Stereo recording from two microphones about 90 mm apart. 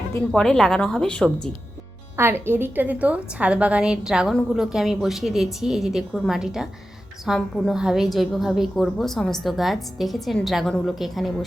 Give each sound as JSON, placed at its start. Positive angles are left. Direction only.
{"t": 0.3, "sound": "a woman's voice", "side_deg": 5}
{"t": 2.1, "sound": "a woman's voice", "side_deg": -25}